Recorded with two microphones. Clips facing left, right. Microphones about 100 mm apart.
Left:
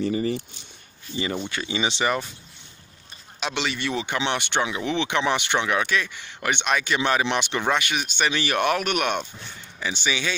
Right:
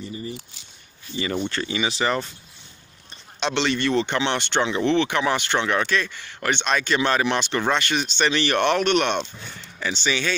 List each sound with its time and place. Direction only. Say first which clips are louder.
0.0 s speech: left 9 dB; 90° left
1.3 s speech: right 3 dB; 5° left (ahead or behind)
1.8 s speech: even; 20° left (ahead or behind)
2.0 s speech: right 1 dB; 5° left (ahead or behind)
3.3 s speech: right 5 dB; 5° left (ahead or behind)